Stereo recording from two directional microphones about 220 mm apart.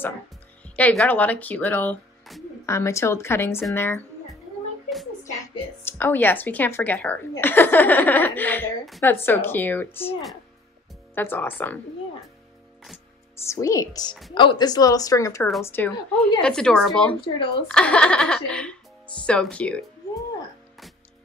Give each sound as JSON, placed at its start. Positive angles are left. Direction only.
{"t": 0.7, "sound": "speech", "side_deg": 5}
{"t": 5.9, "sound": "speech", "side_deg": 10}
{"t": 13.5, "sound": "a woman's voice", "side_deg": 15}